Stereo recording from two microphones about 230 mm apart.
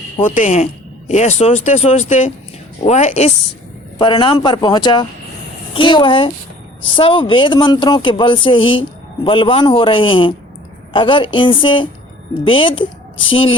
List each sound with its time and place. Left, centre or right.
0.2 s speech: left